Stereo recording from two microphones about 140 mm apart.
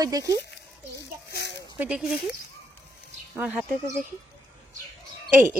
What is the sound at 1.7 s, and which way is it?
Speech, 5° right (ahead or behind).